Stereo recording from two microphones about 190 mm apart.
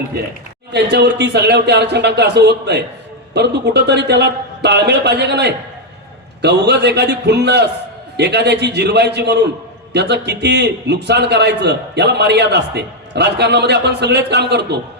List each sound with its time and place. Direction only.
0.7 s a man's voice: 60° right (ahead or behind)